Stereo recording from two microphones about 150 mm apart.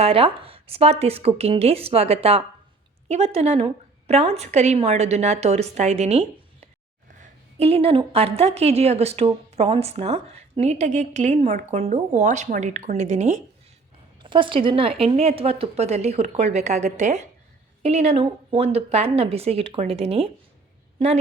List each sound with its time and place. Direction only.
0.0 s a woman's voice: 40° right (ahead or behind)
7.6 s a woman's voice: 40° right (ahead or behind)
14.2 s a woman's voice: 35° right (ahead or behind)